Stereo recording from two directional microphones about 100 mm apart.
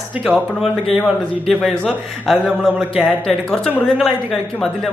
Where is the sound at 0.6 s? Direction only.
Centre (ahead or behind).